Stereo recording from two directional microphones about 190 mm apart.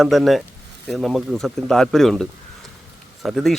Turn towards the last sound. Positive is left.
turn(degrees=0)  # may be behind; listen again after turning